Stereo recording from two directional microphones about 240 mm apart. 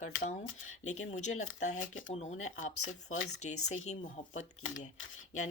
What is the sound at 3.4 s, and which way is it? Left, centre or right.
Speech, left.